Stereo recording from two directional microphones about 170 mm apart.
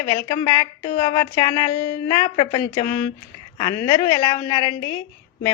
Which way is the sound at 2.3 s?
30° left (ahead or behind).